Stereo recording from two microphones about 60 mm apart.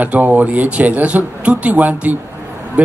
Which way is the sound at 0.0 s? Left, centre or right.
Right.